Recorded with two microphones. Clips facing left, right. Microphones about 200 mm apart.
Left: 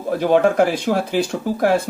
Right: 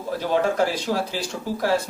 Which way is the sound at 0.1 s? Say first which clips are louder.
Left 7 dB; 55° left (ahead or behind).